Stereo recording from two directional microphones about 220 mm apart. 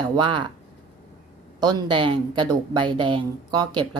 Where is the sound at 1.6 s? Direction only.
20° right (ahead or behind).